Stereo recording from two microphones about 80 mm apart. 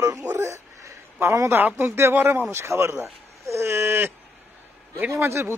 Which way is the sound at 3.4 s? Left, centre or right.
Right.